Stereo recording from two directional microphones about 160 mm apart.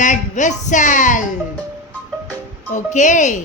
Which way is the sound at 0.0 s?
50° left (ahead or behind).